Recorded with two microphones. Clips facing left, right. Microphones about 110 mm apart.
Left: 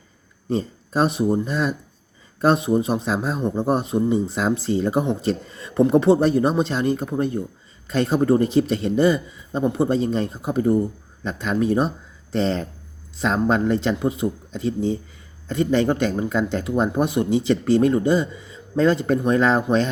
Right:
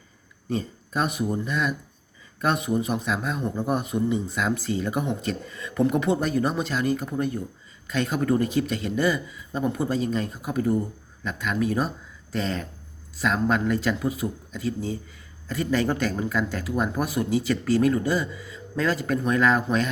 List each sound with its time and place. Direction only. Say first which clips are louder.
0.5 s a man's voice: left 5 dB; 30° left (ahead or behind)